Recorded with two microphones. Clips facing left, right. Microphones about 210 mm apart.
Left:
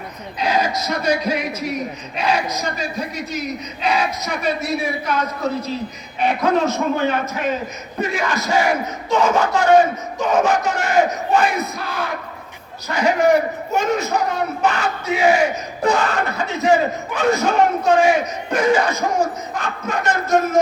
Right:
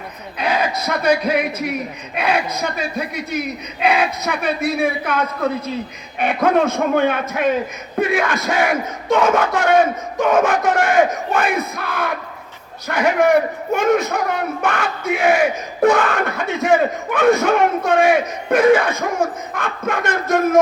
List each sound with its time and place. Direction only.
0.3 s speech: 55° right (ahead or behind)